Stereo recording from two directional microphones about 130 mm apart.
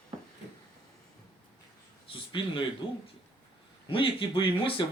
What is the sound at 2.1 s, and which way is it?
Speech, 40° left (ahead or behind).